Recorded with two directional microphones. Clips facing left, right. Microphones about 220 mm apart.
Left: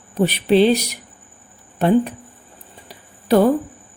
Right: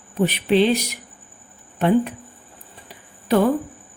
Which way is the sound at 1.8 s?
35° left (ahead or behind).